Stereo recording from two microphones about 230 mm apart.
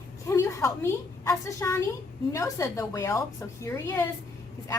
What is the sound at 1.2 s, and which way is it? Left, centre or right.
A woman's voice, centre.